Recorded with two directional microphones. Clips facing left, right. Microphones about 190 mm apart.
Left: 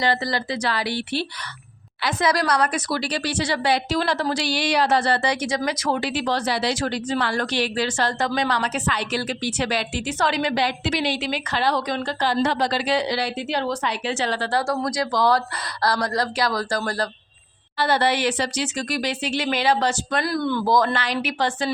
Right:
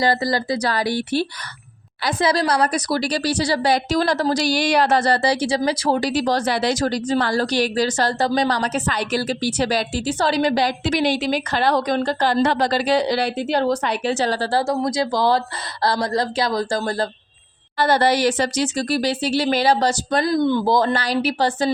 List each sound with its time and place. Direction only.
0.0 s speech: 40° right (ahead or behind)
2.0 s a woman's voice: 30° right (ahead or behind)
14.7 s a woman's voice: 25° right (ahead or behind)
17.7 s speech: 45° right (ahead or behind)
20.2 s speech: 20° right (ahead or behind); by 21.7 s 35° right (ahead or behind)